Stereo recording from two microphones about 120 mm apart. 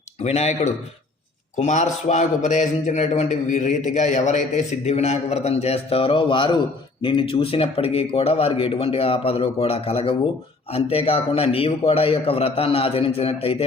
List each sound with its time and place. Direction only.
0.2 s a man's voice: 60° left (ahead or behind)
1.5 s a man's voice: 90° left; by 13.7 s 55° left (ahead or behind)